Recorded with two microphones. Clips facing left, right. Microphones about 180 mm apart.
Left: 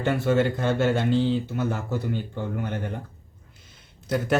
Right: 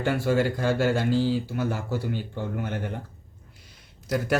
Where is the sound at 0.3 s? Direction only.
5° right (ahead or behind).